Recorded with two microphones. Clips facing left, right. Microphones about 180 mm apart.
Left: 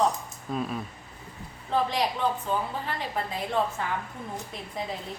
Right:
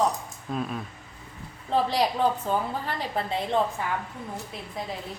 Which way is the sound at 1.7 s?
35° right (ahead or behind).